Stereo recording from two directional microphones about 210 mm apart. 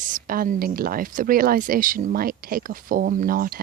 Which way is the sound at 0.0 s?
40° right (ahead or behind).